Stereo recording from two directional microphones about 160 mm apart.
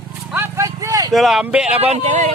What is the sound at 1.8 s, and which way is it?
Speech, 40° right (ahead or behind).